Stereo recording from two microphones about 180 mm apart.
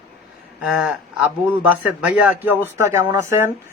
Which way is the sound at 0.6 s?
5° right (ahead or behind).